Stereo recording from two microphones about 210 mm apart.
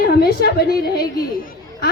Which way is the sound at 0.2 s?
45° left (ahead or behind).